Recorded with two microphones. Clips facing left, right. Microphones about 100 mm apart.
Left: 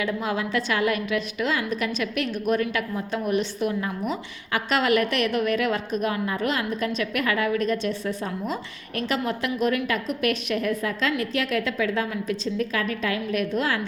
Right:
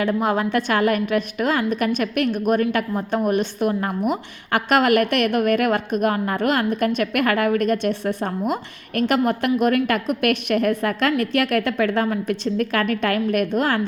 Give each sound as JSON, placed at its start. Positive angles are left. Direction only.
{"t": 0.0, "sound": "a woman's voice", "side_deg": -50}